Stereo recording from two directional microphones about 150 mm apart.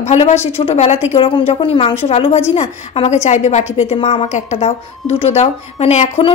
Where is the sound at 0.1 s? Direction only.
45° left (ahead or behind).